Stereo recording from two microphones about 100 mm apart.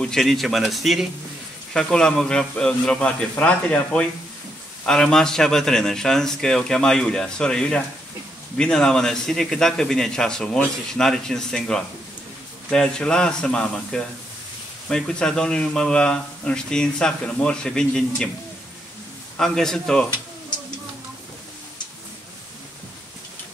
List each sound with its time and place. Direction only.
0.0 s a man's voice: 5° left (ahead or behind)
19.3 s a man's voice: 5° left (ahead or behind)